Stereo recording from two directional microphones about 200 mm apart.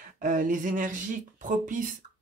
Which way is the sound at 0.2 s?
40° right (ahead or behind).